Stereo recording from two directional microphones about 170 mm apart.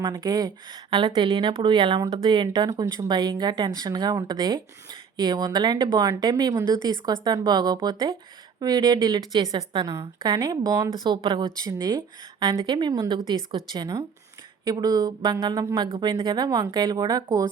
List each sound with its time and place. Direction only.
0.1 s a woman's voice: 25° right (ahead or behind)